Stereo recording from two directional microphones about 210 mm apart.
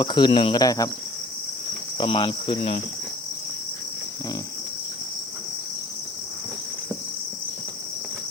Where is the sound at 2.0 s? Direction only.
25° left (ahead or behind).